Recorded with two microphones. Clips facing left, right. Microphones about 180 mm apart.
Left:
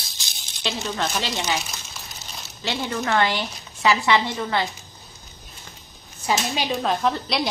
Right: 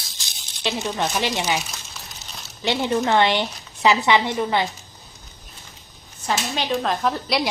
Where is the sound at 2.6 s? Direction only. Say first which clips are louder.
Right 5 dB; 20° right (ahead or behind).